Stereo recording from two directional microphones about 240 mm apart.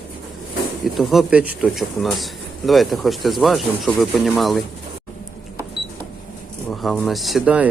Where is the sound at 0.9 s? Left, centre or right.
Centre.